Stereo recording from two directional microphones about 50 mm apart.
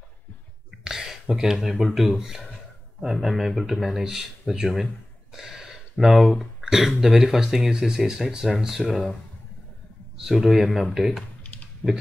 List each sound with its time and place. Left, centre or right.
0.8 s a sound: centre
1.3 s speech: centre
5.3 s a sound: centre
7.0 s speech: centre
10.1 s a man's voice: centre
11.4 s computer keyboard: left